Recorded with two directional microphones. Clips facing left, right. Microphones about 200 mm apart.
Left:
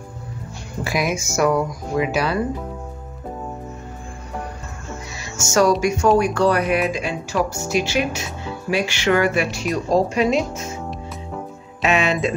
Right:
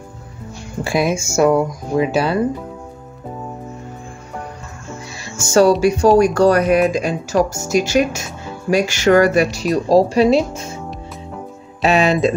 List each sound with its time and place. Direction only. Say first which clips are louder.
0.8 s speech: right 5 dB; 25° right (ahead or behind)
5.4 s speech: right 5 dB; 30° right (ahead or behind)
11.8 s speech: right 5 dB; 35° right (ahead or behind)